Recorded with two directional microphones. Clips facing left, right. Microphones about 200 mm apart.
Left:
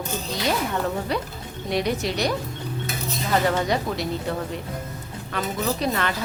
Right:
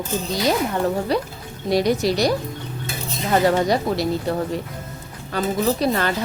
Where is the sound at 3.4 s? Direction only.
35° right (ahead or behind).